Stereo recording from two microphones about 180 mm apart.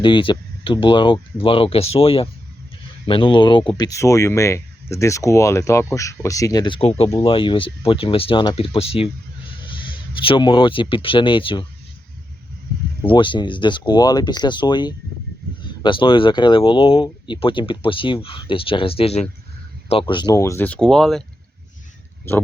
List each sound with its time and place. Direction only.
0.0 s speech: 25° left (ahead or behind)
13.1 s speech: 25° left (ahead or behind); by 21.2 s 5° left (ahead or behind)